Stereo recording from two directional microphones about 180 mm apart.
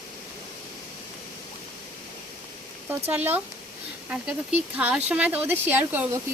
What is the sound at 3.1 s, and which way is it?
Speech, 10° right (ahead or behind).